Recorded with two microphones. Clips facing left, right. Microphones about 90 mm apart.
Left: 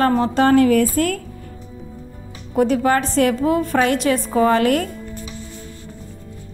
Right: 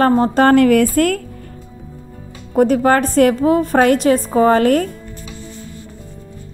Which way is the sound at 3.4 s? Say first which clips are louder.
Right 4 dB; 40° right (ahead or behind).